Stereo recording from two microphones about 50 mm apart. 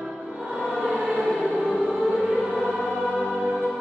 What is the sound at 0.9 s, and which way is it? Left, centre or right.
Choir, centre.